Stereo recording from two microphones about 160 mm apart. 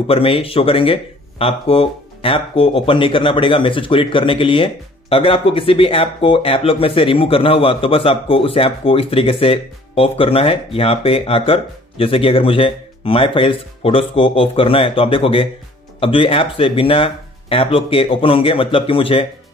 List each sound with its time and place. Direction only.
0.1 s speech: 35° left (ahead or behind)